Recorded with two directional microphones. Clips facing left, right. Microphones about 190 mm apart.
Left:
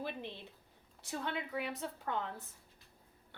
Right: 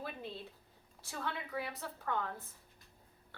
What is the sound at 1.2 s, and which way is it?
A woman's voice, 20° left (ahead or behind).